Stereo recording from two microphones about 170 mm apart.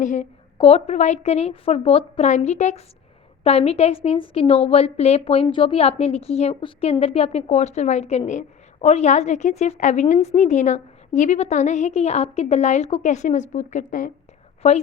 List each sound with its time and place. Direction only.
0.0 s a woman's voice: 45° left (ahead or behind)
14.6 s a woman's voice: 35° left (ahead or behind)